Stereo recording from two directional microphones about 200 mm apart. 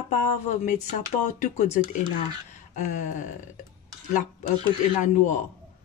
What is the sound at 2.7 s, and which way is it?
Speech, 35° left (ahead or behind).